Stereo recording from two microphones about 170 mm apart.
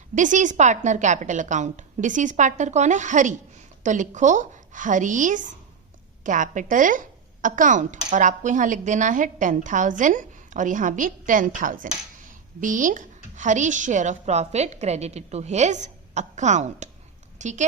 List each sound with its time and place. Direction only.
0.1 s speech: 50° right (ahead or behind)